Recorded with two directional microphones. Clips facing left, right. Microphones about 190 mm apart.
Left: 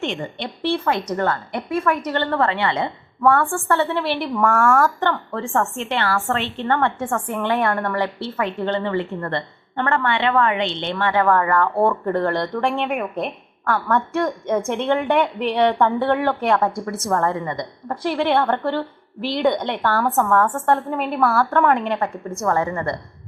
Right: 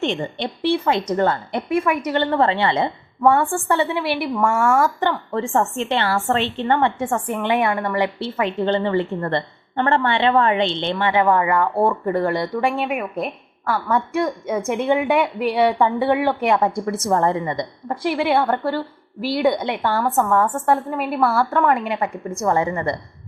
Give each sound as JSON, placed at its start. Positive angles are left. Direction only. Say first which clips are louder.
{"t": 0.0, "sound": "a woman's voice", "louder": "right 3 dB", "side_deg": -25}
{"t": 10.9, "sound": "a woman's voice", "louder": "even", "side_deg": -15}
{"t": 14.7, "sound": "a woman's voice", "louder": "right 3 dB", "side_deg": -15}
{"t": 20.0, "sound": "a woman's voice", "louder": "even", "side_deg": 0}